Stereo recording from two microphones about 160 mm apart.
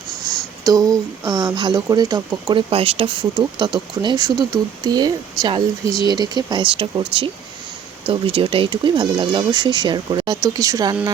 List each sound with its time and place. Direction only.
0.3 s speech: 20° right (ahead or behind)
8.0 s speech: 35° right (ahead or behind)